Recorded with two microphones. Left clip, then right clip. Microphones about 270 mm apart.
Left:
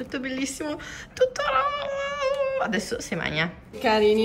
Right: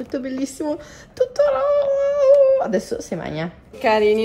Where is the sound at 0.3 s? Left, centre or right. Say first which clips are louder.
Right 5 dB; centre.